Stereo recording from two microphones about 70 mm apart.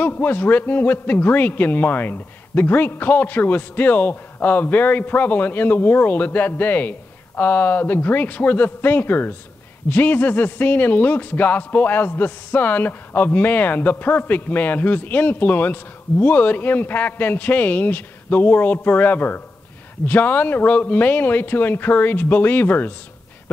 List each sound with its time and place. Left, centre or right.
0.0 s speech: left